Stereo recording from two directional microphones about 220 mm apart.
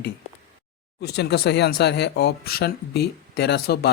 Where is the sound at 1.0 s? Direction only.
50° left (ahead or behind).